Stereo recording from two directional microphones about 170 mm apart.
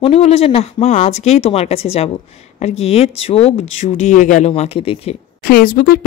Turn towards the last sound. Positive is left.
turn(degrees=60)  # may be behind; listen again after turning